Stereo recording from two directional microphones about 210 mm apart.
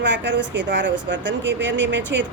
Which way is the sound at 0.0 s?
60° right (ahead or behind).